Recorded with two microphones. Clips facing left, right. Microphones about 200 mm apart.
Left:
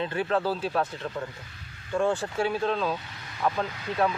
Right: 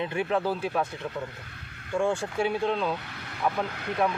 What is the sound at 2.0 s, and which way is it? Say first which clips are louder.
Speech: even; 15° right (ahead or behind).